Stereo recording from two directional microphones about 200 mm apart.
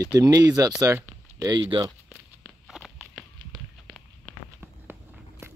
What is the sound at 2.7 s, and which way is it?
Walk, centre (ahead or behind).